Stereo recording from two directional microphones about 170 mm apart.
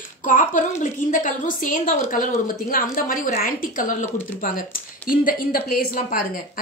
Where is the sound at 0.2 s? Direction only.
50° left (ahead or behind).